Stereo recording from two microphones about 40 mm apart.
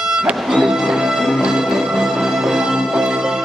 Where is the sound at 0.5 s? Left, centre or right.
Centre.